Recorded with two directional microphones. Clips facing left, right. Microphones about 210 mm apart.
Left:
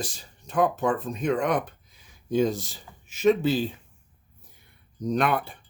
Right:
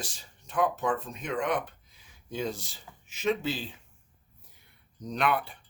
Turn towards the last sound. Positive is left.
turn(degrees=45)  # may be behind; listen again after turning